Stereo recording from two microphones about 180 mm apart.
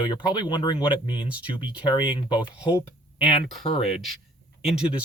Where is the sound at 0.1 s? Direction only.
25° left (ahead or behind).